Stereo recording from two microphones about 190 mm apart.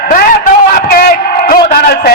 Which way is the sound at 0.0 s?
55° left (ahead or behind).